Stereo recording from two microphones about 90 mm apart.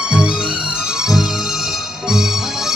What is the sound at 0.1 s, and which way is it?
Music, 10° right (ahead or behind).